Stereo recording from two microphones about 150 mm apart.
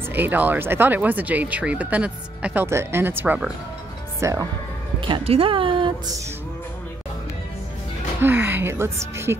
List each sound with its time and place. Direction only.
0.1 s speech: 10° right (ahead or behind)
4.2 s speech: 20° right (ahead or behind)
5.0 s a woman's voice: 40° right (ahead or behind)
8.2 s speech: 15° right (ahead or behind)